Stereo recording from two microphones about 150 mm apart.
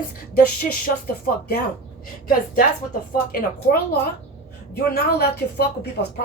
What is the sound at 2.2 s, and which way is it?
Speech, 70° left (ahead or behind).